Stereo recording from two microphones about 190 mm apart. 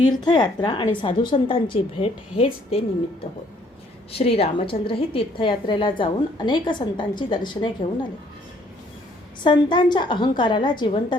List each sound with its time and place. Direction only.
0.3 s a woman's voice: 25° left (ahead or behind)
4.1 s a woman's voice: 30° left (ahead or behind)
9.4 s a woman's voice: 25° left (ahead or behind)